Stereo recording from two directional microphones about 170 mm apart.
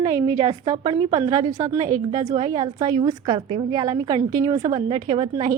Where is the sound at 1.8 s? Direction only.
50° right (ahead or behind).